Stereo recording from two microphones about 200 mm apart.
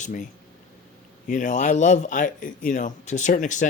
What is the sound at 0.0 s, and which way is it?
Speech, 40° left (ahead or behind).